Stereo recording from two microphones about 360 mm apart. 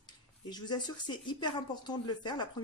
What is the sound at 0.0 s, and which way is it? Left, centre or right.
Speech, centre.